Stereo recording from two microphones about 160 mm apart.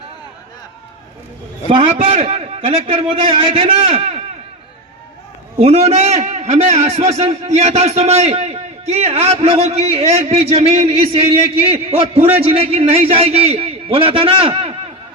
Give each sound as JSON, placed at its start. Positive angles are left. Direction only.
{"t": 1.7, "sound": "a man's voice", "side_deg": -35}
{"t": 5.5, "sound": "a man's voice", "side_deg": -40}